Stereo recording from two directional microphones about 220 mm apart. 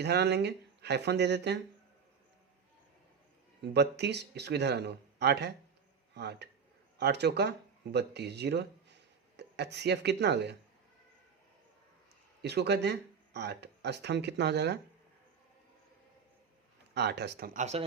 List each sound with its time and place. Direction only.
0.0 s speech: 50° right (ahead or behind)
3.6 s speech: 50° right (ahead or behind)
12.4 s speech: 50° right (ahead or behind)
16.9 s speech: 50° right (ahead or behind); by 17.8 s 30° right (ahead or behind)